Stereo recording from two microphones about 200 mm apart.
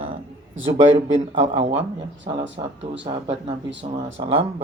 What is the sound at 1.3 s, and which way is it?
Speech, 30° right (ahead or behind).